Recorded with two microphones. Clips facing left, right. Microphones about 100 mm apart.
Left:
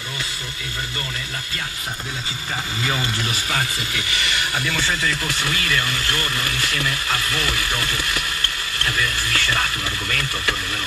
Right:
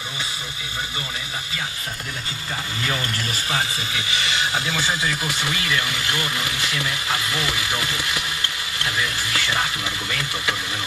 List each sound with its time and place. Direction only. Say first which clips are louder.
3.4 s speech: even; 20° right (ahead or behind)